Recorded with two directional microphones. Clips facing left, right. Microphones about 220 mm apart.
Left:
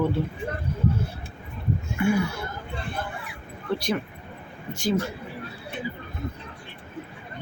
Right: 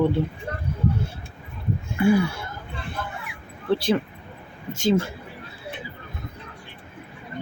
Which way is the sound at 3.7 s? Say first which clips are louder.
Right 5 dB; 30° right (ahead or behind).